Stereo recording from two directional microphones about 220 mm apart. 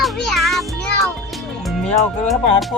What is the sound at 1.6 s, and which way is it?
Speech, centre (ahead or behind).